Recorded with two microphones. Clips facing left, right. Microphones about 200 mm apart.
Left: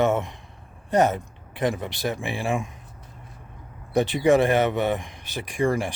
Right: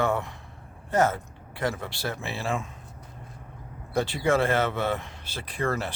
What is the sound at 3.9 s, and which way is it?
Speech, 20° left (ahead or behind).